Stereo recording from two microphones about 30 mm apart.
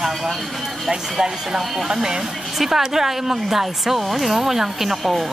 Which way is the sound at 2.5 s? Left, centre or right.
Centre.